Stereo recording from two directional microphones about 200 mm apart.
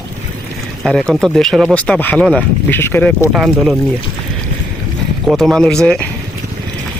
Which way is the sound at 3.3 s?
5° right (ahead or behind).